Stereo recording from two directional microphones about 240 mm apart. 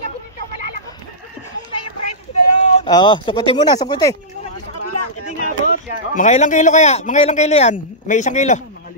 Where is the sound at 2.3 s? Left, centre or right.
Left.